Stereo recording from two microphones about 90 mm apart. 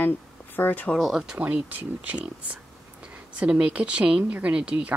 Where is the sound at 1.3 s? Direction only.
20° right (ahead or behind).